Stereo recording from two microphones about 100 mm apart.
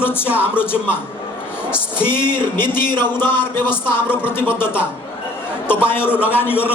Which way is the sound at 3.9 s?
20° left (ahead or behind).